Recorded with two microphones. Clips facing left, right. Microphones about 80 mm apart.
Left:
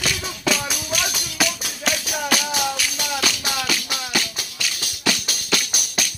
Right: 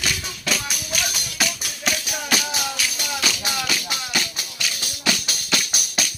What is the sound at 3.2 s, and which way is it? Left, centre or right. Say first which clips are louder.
Music: right 1 dB; centre.